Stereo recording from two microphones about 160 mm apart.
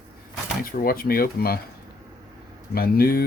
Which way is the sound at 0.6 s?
65° left (ahead or behind).